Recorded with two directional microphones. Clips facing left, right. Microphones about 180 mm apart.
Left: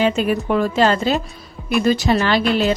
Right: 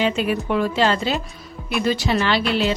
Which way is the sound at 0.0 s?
45° left (ahead or behind).